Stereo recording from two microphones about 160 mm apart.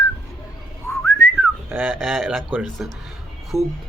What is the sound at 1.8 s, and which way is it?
Speech, centre (ahead or behind).